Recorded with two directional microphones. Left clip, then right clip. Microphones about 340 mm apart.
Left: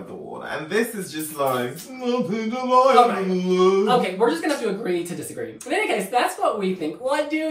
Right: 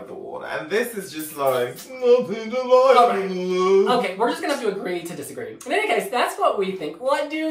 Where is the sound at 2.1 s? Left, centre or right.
Left.